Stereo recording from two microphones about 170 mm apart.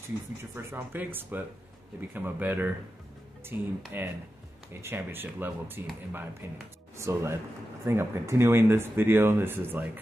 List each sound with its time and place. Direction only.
0.4 s speech: 15° right (ahead or behind)
7.0 s speech: 15° right (ahead or behind)